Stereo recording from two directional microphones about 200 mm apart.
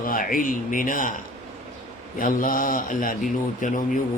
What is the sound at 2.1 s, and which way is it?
A man's voice, 45° left (ahead or behind).